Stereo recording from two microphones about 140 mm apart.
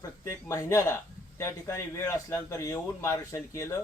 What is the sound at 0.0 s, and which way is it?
Speech, 25° left (ahead or behind).